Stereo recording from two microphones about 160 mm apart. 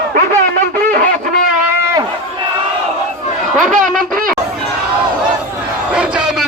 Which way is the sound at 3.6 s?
55° right (ahead or behind).